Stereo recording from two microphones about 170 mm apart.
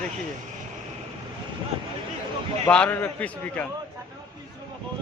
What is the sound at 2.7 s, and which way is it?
A man's voice, 5° left (ahead or behind).